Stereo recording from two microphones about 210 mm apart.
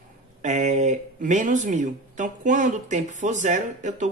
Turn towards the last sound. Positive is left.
turn(degrees=-35)  # may be behind; listen again after turning